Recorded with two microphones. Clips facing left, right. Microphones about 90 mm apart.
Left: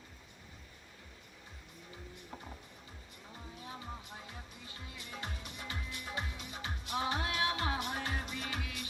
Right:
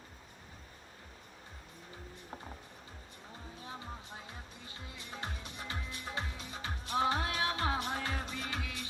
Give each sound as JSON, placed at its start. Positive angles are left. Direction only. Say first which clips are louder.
{"t": 3.6, "sound": "music", "louder": "even", "side_deg": -30}